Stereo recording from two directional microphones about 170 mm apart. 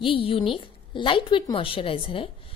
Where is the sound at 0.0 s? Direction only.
30° left (ahead or behind).